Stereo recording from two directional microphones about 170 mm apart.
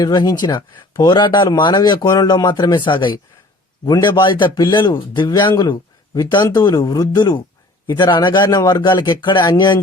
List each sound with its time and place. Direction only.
0.0 s speech: 25° left (ahead or behind)